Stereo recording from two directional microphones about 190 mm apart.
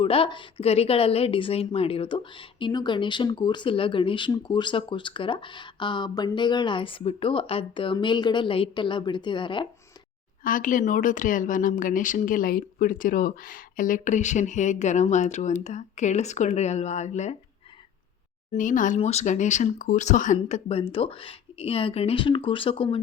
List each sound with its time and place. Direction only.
0.0 s a woman's voice: 30° left (ahead or behind)
10.4 s speech: 45° left (ahead or behind)
18.5 s speech: 45° left (ahead or behind)